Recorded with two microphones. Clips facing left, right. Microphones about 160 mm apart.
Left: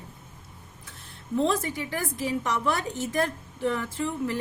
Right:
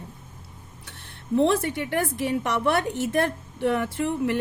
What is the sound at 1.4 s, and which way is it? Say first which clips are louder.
A woman's voice: right 4 dB; 70° right (ahead or behind).